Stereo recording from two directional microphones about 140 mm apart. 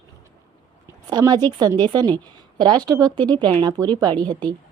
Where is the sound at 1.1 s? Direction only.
30° right (ahead or behind).